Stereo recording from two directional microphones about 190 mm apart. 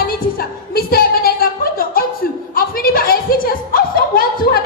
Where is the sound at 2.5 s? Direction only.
50° left (ahead or behind).